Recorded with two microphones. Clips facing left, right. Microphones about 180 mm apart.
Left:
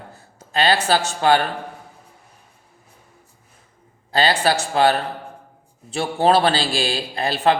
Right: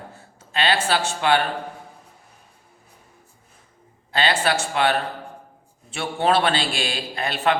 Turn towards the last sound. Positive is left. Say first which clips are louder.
# left 3 dB
turn(degrees=35)  # may be behind; listen again after turning